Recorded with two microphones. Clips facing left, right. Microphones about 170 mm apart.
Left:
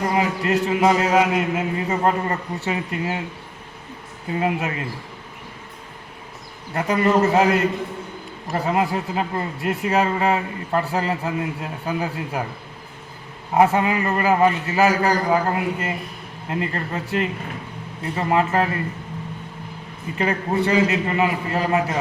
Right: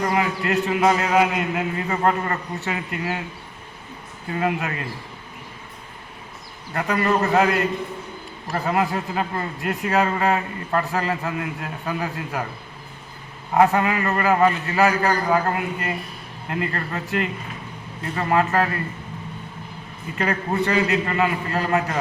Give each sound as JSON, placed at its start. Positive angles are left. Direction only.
{"t": 0.1, "sound": "a man's voice", "side_deg": 25}
{"t": 4.3, "sound": "a man's voice", "side_deg": 20}
{"t": 6.7, "sound": "a man's voice", "side_deg": 20}
{"t": 13.5, "sound": "a man's voice", "side_deg": 20}
{"t": 20.1, "sound": "a man's voice", "side_deg": 20}